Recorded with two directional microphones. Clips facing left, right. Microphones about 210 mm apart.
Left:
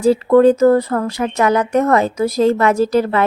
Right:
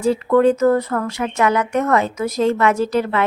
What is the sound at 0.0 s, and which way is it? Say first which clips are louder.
Speech: left 4 dB; 35° left (ahead or behind).